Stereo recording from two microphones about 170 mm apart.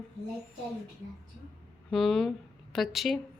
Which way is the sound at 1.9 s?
Centre (ahead or behind).